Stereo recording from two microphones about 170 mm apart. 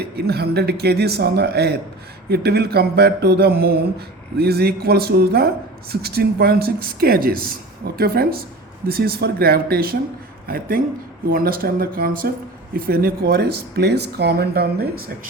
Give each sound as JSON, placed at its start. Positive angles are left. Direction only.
{"t": 0.0, "sound": "speech", "side_deg": -70}
{"t": 11.3, "sound": "speech", "side_deg": -60}